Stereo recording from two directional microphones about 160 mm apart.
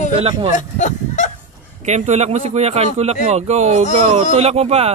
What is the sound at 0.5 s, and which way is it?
Speech, 50° left (ahead or behind).